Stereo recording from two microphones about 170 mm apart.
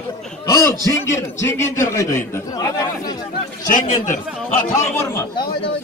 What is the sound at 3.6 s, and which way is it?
Speech, 50° left (ahead or behind).